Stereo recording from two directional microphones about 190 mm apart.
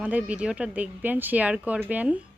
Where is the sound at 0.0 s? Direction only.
10° right (ahead or behind).